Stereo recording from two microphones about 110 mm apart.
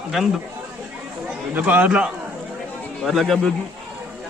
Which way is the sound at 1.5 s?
15° right (ahead or behind).